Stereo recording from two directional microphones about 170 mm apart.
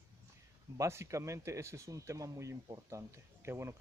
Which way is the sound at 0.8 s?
15° right (ahead or behind).